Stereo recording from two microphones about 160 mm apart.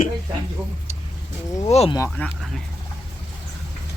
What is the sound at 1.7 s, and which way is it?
Speech, 40° left (ahead or behind).